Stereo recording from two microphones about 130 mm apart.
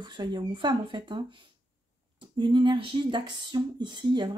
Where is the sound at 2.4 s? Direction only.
35° right (ahead or behind).